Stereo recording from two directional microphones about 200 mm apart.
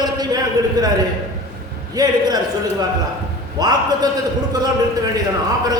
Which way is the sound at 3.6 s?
20° right (ahead or behind).